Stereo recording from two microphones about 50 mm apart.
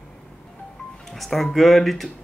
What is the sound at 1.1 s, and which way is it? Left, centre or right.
Speech, centre.